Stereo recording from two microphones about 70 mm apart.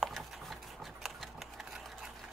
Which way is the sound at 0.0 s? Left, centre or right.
Centre.